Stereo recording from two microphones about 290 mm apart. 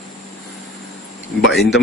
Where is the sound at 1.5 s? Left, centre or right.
Centre.